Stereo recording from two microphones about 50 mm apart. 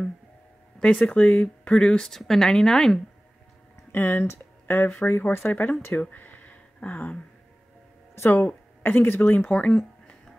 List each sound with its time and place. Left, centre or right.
1.0 s speech: left
2.0 s a woman's voice: centre
3.9 s speech: left
5.5 s speech: left
5.9 s a sound: left
8.1 s a sound: left
8.4 s speech: left
9.5 s speech: left